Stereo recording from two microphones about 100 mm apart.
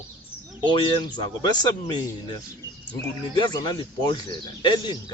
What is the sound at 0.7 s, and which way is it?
Speech, 45° left (ahead or behind).